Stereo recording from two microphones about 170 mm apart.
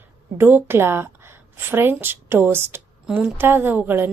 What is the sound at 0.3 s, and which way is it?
A woman's voice, 15° right (ahead or behind).